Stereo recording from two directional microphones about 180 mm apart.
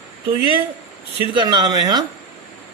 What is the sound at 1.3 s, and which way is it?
Speech, 25° right (ahead or behind).